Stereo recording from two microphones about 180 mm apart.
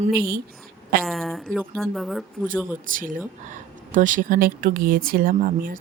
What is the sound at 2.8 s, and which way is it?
Speech, 50° right (ahead or behind).